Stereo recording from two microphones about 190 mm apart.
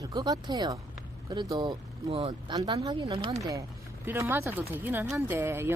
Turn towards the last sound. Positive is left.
turn(degrees=-15)  # may be behind; listen again after turning